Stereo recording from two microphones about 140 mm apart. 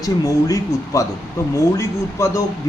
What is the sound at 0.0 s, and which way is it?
A man's voice, 25° left (ahead or behind).